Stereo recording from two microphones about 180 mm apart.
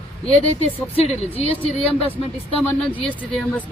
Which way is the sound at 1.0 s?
35° left (ahead or behind).